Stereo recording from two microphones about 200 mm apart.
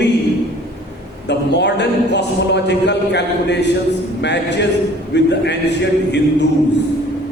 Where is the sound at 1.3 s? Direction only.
60° left (ahead or behind).